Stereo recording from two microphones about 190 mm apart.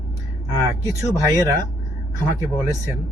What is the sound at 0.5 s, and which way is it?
Speech, 15° right (ahead or behind).